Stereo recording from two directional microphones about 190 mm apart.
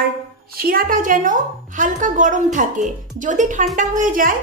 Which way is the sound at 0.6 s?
50° right (ahead or behind).